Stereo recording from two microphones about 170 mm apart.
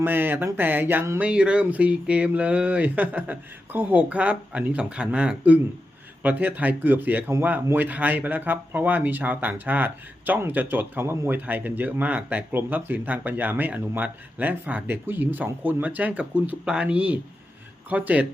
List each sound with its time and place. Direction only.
0.0 s speech: 10° right (ahead or behind)